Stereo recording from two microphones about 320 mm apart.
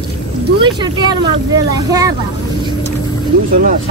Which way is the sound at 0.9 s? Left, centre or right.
Centre.